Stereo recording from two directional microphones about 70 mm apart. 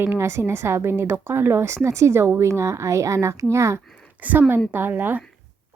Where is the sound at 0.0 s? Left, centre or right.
Right.